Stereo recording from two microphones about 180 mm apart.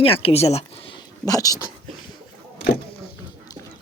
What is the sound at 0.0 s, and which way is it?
Speech, 30° left (ahead or behind).